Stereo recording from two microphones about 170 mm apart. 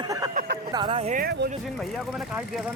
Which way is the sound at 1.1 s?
65° right (ahead or behind).